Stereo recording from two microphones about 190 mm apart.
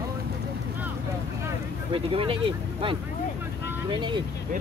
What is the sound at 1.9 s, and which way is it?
Speech, 30° right (ahead or behind).